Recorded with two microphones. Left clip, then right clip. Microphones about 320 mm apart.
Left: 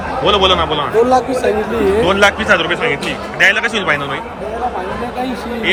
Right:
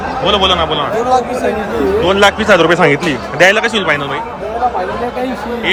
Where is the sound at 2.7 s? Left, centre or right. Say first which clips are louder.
Right 6 dB; right.